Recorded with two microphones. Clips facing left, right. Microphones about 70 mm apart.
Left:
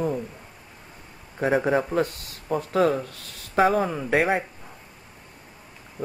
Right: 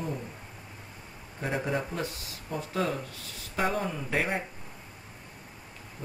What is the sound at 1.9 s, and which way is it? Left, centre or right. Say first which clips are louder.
Speech: left 10 dB; left.